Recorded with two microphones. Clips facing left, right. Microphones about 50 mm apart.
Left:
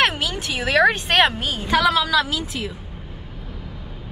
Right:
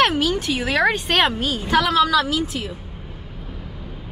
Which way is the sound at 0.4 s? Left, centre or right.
Centre.